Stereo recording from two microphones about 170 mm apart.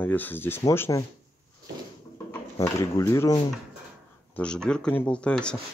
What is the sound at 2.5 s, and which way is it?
Speech, 20° left (ahead or behind).